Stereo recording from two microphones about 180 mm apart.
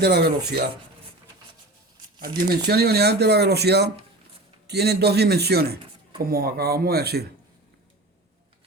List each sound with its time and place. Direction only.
0.0 s speech: 65° right (ahead or behind)
2.1 s speech: 55° right (ahead or behind)